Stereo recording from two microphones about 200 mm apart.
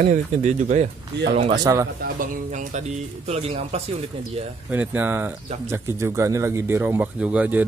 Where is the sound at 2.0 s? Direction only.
40° right (ahead or behind).